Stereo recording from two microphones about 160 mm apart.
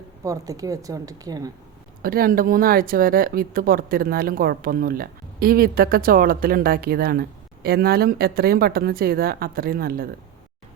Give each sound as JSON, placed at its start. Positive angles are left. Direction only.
{"t": 0.3, "sound": "speech", "side_deg": -20}
{"t": 2.0, "sound": "speech", "side_deg": -65}